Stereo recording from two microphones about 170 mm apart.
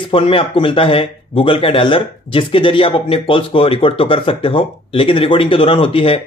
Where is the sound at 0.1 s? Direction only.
30° left (ahead or behind).